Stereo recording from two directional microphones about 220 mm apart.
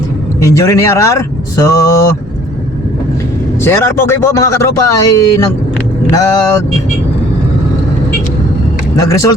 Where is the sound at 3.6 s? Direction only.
10° left (ahead or behind).